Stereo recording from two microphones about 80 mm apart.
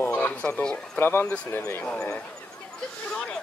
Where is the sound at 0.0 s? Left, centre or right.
Left.